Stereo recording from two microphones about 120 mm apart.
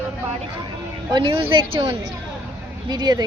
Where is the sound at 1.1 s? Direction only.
40° right (ahead or behind).